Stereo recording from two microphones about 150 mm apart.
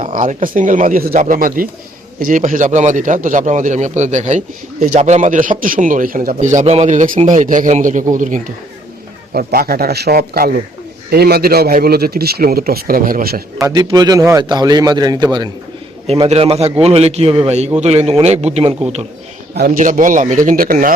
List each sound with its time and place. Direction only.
0.0 s a man's voice: 60° right (ahead or behind)
6.9 s a man's voice: 60° right (ahead or behind)
9.3 s speech: 75° right (ahead or behind)
13.6 s a man's voice: 20° right (ahead or behind)
16.0 s a man's voice: 45° right (ahead or behind)
19.5 s a man's voice: 65° right (ahead or behind)